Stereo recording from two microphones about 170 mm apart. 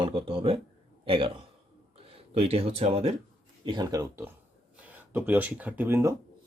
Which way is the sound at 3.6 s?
25° right (ahead or behind).